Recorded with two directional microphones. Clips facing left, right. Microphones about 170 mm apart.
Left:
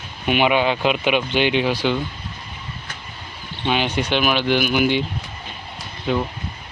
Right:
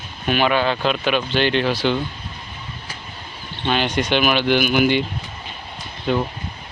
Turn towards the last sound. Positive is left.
turn(degrees=5)  # may be behind; listen again after turning